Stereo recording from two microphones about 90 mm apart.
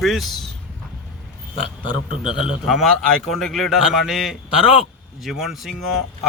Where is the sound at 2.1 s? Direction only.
75° left (ahead or behind).